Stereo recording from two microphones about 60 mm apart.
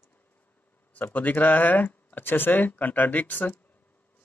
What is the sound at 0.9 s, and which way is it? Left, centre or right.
Speech, left.